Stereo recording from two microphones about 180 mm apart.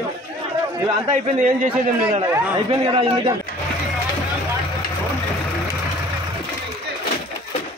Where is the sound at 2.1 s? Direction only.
30° right (ahead or behind).